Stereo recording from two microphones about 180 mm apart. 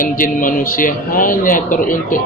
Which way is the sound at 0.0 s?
50° left (ahead or behind).